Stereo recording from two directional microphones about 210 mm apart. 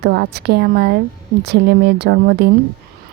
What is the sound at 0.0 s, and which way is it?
Speech, 50° right (ahead or behind).